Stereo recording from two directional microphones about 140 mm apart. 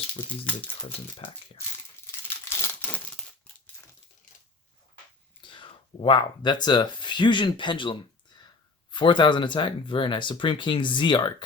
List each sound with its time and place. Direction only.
0.1 s speech: 10° left (ahead or behind)
2.2 s crumpling: 15° left (ahead or behind)
5.4 s speech: 35° left (ahead or behind)